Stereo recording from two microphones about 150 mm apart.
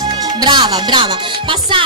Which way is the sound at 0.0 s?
25° right (ahead or behind).